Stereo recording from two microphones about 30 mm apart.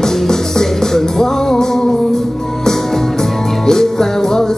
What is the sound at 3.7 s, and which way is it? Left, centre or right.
Music, centre.